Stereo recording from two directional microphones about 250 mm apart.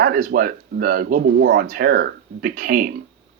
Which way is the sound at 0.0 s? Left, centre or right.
Right.